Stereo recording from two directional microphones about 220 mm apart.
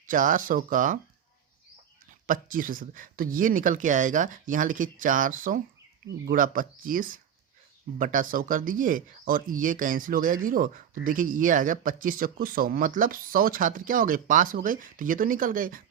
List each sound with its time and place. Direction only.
0.0 s speech: 35° right (ahead or behind)
2.2 s speech: 40° right (ahead or behind)